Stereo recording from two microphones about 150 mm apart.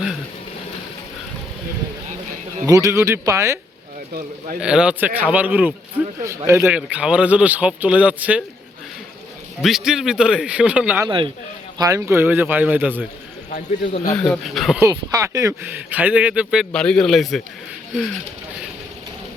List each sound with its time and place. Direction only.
2.6 s speech: 25° right (ahead or behind)
4.6 s speech: 5° right (ahead or behind)
9.6 s a man's voice: centre (ahead or behind)
11.8 s speech: 20° right (ahead or behind)
13.5 s a man's voice: 50° left (ahead or behind)
14.2 s a man's voice: 5° left (ahead or behind)
14.8 s speech: 20° right (ahead or behind)
15.6 s a man's voice: 10° right (ahead or behind)